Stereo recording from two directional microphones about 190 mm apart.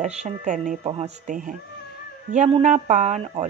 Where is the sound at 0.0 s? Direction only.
40° right (ahead or behind).